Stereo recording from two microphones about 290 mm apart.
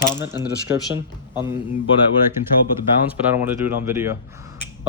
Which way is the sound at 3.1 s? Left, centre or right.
Centre.